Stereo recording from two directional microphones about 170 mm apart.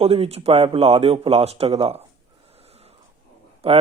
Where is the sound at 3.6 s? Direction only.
35° right (ahead or behind).